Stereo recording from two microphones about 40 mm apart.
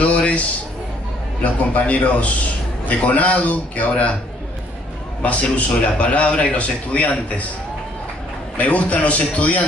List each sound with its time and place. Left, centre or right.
0.0 s a sound: left
1.4 s a man's voice: left
5.2 s a man's voice: left
8.5 s a man's voice: left